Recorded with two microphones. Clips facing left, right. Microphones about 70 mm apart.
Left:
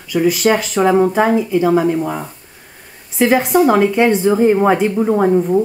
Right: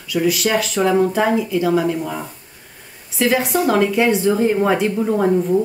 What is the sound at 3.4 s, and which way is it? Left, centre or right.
Speech, centre.